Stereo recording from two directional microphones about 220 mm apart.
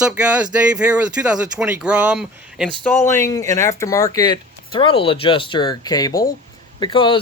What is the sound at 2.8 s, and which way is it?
Speech, 10° left (ahead or behind).